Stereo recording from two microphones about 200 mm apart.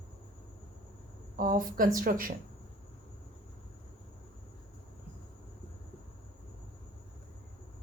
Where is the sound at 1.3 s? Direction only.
45° right (ahead or behind).